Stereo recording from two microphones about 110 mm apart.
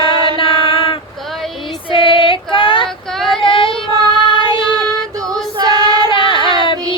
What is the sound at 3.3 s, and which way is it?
Child singing, 50° left (ahead or behind).